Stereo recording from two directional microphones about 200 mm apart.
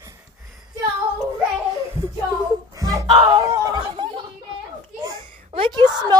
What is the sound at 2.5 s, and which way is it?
Speech, 15° right (ahead or behind).